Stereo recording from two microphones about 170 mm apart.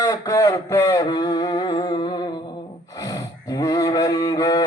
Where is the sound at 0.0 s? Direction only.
20° left (ahead or behind).